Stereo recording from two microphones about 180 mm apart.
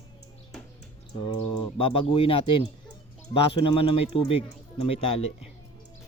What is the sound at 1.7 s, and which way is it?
Speech, 30° left (ahead or behind).